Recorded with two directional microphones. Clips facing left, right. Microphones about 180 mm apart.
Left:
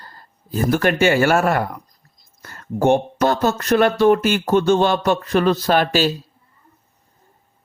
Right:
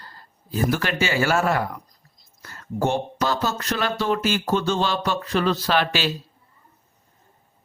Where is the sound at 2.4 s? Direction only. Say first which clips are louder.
Left 4 dB; 55° left (ahead or behind).